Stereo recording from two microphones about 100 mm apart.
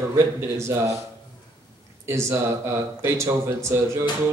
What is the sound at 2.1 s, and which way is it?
A man's voice, 30° right (ahead or behind).